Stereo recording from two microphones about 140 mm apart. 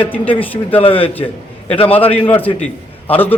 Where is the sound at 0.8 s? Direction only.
40° left (ahead or behind).